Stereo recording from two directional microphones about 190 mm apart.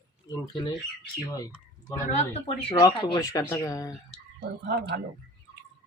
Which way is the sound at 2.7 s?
20° left (ahead or behind).